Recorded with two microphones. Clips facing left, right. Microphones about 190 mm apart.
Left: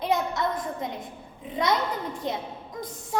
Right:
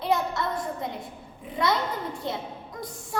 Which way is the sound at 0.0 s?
20° left (ahead or behind).